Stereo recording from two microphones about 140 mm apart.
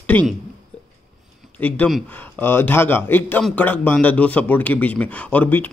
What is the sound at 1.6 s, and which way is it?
Speech, 10° left (ahead or behind).